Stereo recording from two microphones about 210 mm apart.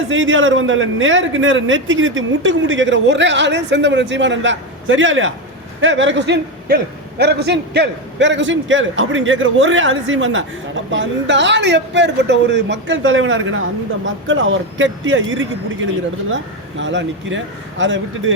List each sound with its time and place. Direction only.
0.1 s a man's voice: 65° right (ahead or behind)